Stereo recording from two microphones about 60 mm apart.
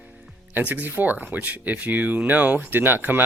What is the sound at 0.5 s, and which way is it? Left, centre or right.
Speech, right.